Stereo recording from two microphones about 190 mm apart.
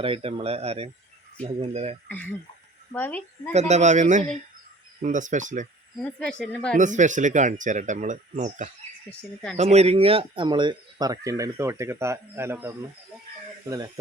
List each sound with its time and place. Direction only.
0.0 s speech: 30° right (ahead or behind)
2.0 s a woman's voice: 10° left (ahead or behind)
3.5 s speech: 35° right (ahead or behind)
6.0 s speech: 5° left (ahead or behind)
6.7 s speech: 40° right (ahead or behind)
9.0 s speech: 5° left (ahead or behind)
9.6 s speech: 35° right (ahead or behind)